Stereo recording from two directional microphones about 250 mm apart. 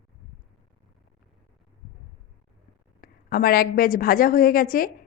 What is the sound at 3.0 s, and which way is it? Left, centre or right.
A woman's voice, left.